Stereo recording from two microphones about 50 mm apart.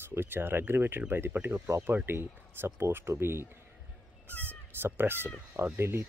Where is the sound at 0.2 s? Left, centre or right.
Right.